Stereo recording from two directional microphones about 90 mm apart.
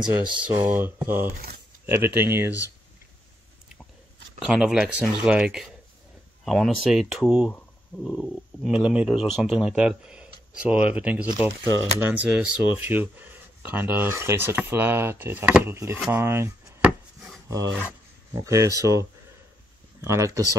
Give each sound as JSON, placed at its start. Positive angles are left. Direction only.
{"t": 0.1, "sound": "speech", "side_deg": -25}
{"t": 4.4, "sound": "speech", "side_deg": -5}
{"t": 8.0, "sound": "stomach rumble", "side_deg": 10}
{"t": 8.6, "sound": "speech", "side_deg": -10}
{"t": 15.7, "sound": "speech", "side_deg": -30}
{"t": 17.5, "sound": "speech", "side_deg": -40}